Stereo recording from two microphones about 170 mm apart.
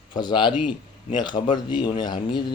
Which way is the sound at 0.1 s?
25° left (ahead or behind).